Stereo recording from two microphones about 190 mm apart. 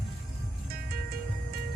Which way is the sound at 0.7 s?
50° right (ahead or behind).